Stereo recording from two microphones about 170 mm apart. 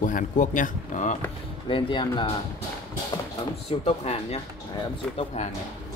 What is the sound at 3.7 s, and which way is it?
Speech, 35° left (ahead or behind).